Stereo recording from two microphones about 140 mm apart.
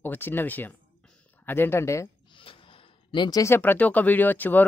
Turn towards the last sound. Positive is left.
turn(degrees=10)  # may be behind; listen again after turning